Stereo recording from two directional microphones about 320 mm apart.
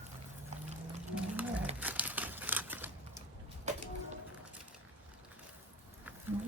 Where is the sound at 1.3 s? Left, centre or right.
Centre.